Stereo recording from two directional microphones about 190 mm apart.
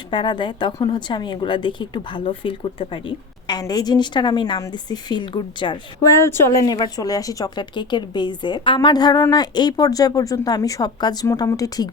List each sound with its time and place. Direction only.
0.1 s speech: 25° left (ahead or behind)